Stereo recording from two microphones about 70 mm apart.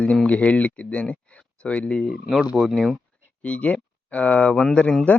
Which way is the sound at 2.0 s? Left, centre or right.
Centre.